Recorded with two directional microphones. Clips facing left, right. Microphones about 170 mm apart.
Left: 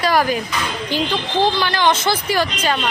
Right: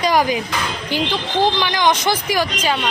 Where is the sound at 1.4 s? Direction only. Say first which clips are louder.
Even; 10° right (ahead or behind).